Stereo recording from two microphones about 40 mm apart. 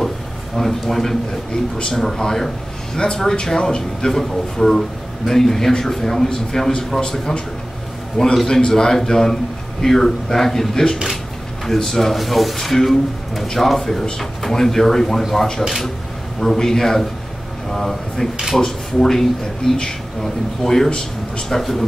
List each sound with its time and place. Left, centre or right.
0.6 s a man's voice: centre
1.8 s a man's voice: left
8.5 s a man's voice: centre